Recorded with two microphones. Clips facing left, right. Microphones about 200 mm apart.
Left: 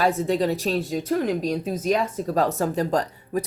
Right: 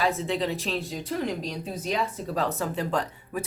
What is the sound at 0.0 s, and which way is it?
A woman's voice, 45° left (ahead or behind).